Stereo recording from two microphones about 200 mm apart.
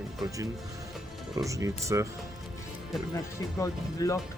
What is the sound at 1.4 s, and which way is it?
Speech, 15° right (ahead or behind).